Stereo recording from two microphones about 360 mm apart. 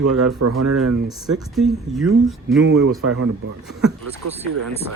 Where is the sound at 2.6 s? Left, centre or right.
Right.